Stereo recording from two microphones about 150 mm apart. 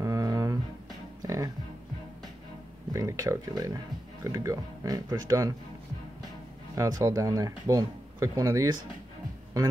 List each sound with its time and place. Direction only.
0.0 s music: 20° right (ahead or behind)
2.9 s speech: 20° right (ahead or behind)
6.7 s speech: 20° right (ahead or behind)